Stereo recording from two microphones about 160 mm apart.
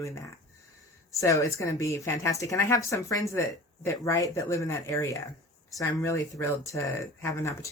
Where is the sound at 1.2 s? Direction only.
20° left (ahead or behind).